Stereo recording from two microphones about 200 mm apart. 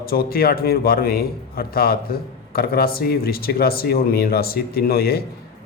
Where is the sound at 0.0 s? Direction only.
50° left (ahead or behind).